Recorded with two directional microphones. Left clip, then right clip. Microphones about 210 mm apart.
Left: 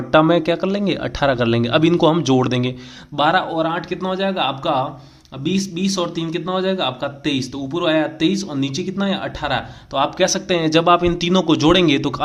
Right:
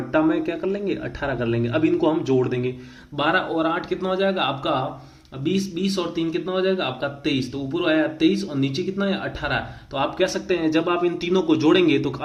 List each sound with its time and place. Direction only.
0.1 s a man's voice: 45° left (ahead or behind)
3.2 s speech: 30° left (ahead or behind)